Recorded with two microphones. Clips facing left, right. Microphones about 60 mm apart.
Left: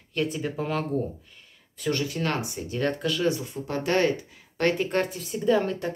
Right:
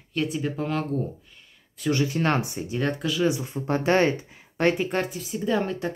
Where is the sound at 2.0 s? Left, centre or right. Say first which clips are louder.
Right 4 dB; right.